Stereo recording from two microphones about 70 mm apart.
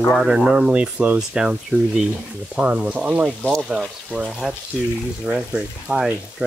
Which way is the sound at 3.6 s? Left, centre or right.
Centre.